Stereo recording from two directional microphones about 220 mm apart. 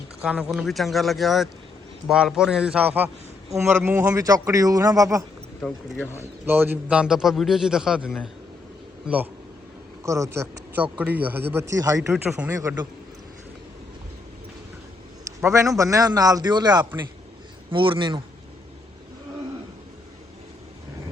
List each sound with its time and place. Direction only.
0.2 s a man's voice: 5° right (ahead or behind)
5.6 s speech: 5° left (ahead or behind)
6.4 s a man's voice: 10° right (ahead or behind)
15.4 s a man's voice: 15° right (ahead or behind)